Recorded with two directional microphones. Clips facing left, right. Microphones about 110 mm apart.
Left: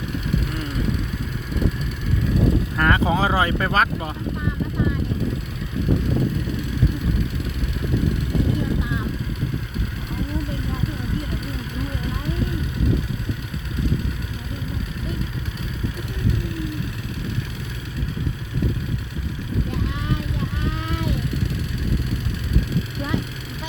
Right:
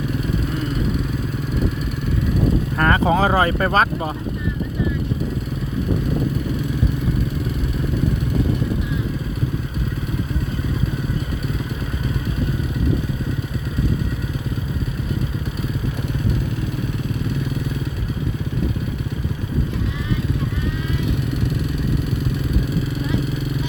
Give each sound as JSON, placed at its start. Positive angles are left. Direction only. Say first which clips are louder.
{"t": 2.7, "sound": "speech", "louder": "right 5 dB", "side_deg": -40}